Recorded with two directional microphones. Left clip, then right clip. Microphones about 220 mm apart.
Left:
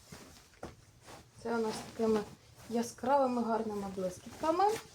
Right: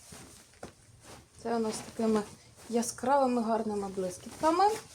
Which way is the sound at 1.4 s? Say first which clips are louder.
Right 2 dB; 50° right (ahead or behind).